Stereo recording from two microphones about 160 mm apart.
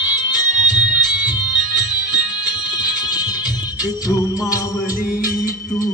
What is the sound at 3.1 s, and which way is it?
Music, 25° left (ahead or behind).